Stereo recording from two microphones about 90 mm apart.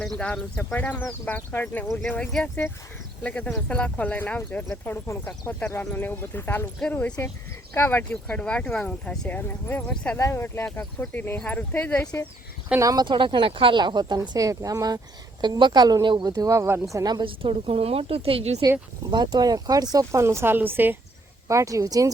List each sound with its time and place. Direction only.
0.0 s speech: 10° left (ahead or behind)
1.9 s speech: centre (ahead or behind)
3.2 s speech: 15° left (ahead or behind)
8.1 s speech: 10° left (ahead or behind)
10.2 s speech: 30° left (ahead or behind); by 12.0 s 15° left (ahead or behind)
12.8 s speech: 40° right (ahead or behind)
13.1 s speech: 65° right (ahead or behind); by 16.8 s 30° right (ahead or behind)
16.9 s speech: 45° right (ahead or behind)
17.2 s a woman's voice: 90° right
19.1 s speech: 50° right (ahead or behind)
20.1 s speech: 30° right (ahead or behind)
21.4 s speech: 35° right (ahead or behind)